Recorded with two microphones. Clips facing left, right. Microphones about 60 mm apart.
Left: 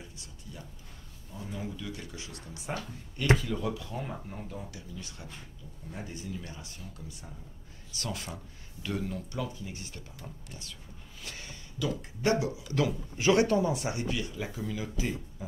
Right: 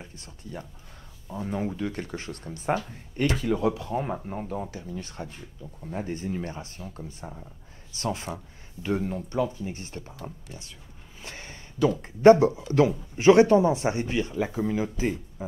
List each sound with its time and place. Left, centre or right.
0.0 s a sound: right
1.3 s speech: right
3.3 s speech: right